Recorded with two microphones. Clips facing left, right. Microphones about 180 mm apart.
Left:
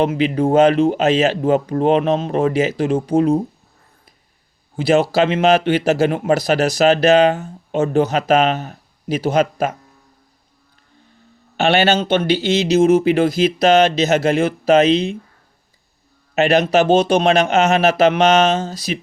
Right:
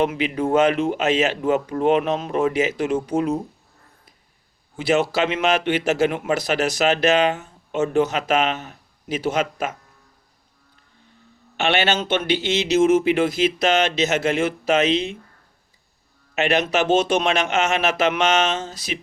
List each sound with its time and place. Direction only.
0.0 s speech: 30° left (ahead or behind)
4.8 s speech: 35° left (ahead or behind)
11.5 s speech: 35° left (ahead or behind)
16.3 s speech: 35° left (ahead or behind)